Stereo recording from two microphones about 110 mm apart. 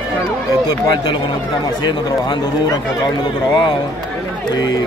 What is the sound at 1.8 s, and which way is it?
Speech, 45° left (ahead or behind).